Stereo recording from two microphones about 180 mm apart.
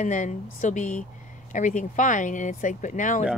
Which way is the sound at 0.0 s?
45° left (ahead or behind).